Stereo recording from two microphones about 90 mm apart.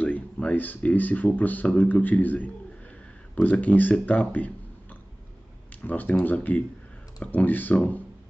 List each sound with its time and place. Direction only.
0.0 s speech: 15° left (ahead or behind)
5.9 s speech: 20° left (ahead or behind)